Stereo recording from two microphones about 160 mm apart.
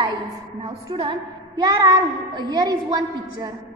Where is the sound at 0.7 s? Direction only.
35° right (ahead or behind).